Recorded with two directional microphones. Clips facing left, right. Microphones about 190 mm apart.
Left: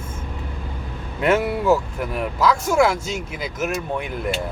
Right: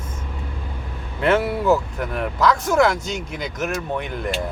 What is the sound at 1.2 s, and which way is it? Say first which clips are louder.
Speech: even; 10° left (ahead or behind).